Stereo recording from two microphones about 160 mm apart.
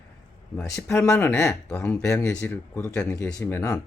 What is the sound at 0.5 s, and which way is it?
Speech, 15° left (ahead or behind).